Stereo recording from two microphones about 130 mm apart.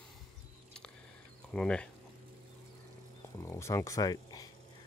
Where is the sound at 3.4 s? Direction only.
20° left (ahead or behind).